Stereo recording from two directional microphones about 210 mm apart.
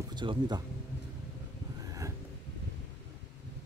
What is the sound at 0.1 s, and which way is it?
Speech, 20° right (ahead or behind).